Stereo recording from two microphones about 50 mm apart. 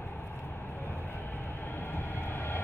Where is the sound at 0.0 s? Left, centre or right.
Left.